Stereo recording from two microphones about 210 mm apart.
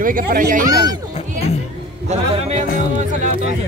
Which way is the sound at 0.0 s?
40° right (ahead or behind).